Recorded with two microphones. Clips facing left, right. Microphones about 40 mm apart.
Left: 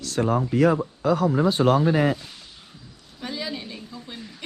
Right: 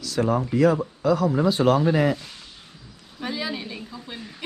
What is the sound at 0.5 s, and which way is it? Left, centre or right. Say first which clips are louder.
Speech: right 1 dB; left.